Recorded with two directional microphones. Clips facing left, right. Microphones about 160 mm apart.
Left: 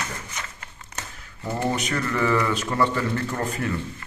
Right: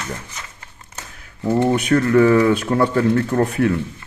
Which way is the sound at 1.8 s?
60° right (ahead or behind).